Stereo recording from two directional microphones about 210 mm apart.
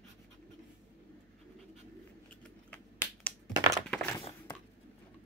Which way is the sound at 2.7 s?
10° left (ahead or behind).